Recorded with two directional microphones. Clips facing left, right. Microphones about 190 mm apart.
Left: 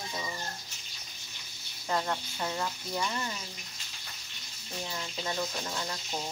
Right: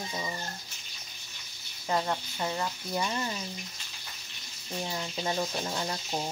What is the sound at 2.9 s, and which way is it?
Speech, 20° right (ahead or behind).